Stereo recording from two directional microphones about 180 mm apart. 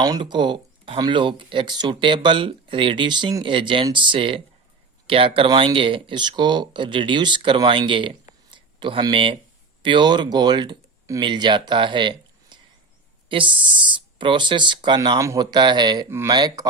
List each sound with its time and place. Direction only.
0.0 s speech: 25° right (ahead or behind)
8.4 s a sound: 25° right (ahead or behind)
9.8 s speech: 25° right (ahead or behind)